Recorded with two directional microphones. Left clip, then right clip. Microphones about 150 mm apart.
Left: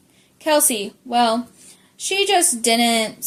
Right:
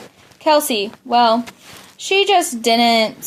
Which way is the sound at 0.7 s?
30° right (ahead or behind).